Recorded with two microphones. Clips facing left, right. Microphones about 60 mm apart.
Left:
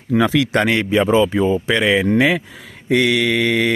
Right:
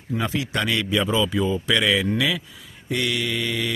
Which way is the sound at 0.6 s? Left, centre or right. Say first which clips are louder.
Left 5 dB; left.